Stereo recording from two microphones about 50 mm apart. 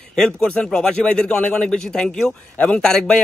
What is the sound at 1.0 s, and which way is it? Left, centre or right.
A man's voice, centre.